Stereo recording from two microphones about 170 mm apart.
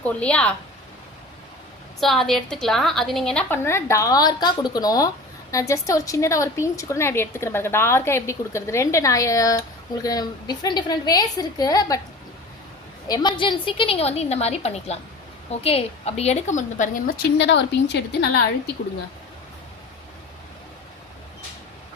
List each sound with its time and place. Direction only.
0.0 s a woman's voice: 5° left (ahead or behind)
2.0 s a woman's voice: centre (ahead or behind); by 11.9 s 20° left (ahead or behind)
13.1 s a woman's voice: 25° left (ahead or behind); by 17.2 s 50° left (ahead or behind)
17.3 s a woman's voice: 90° left